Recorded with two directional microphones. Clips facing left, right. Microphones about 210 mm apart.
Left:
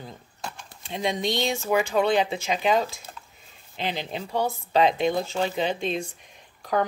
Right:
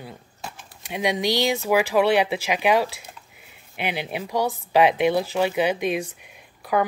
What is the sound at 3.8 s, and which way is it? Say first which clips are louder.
Speech: right 2 dB; 10° right (ahead or behind).